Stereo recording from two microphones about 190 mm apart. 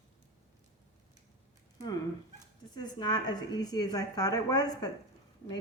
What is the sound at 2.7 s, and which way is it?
A woman's voice, 20° left (ahead or behind).